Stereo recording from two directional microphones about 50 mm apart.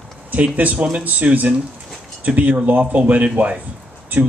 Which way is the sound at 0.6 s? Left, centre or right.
Right.